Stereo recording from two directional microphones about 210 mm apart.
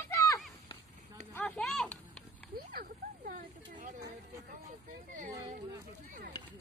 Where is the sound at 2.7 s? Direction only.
40° right (ahead or behind).